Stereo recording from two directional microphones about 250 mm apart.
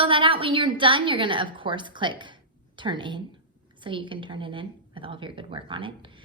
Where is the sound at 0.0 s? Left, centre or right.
Right.